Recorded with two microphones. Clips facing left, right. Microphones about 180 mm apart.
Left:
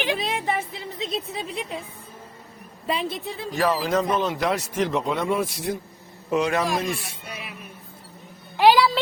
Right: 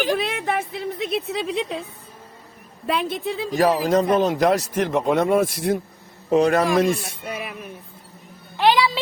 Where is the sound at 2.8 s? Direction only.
65° right (ahead or behind).